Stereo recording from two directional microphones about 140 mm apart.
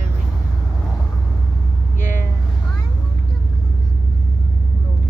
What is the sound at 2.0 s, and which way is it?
Vehicle, 70° left (ahead or behind).